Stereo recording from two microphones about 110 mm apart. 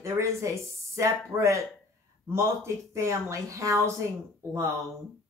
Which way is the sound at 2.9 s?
30° right (ahead or behind).